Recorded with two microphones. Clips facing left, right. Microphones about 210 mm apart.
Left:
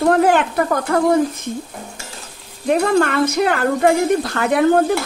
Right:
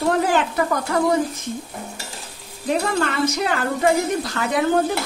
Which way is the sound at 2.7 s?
55° left (ahead or behind).